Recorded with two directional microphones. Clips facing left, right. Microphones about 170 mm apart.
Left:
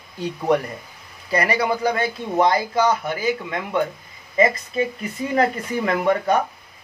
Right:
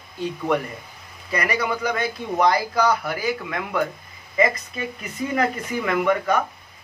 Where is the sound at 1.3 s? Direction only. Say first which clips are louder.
Left 4 dB; 30° left (ahead or behind).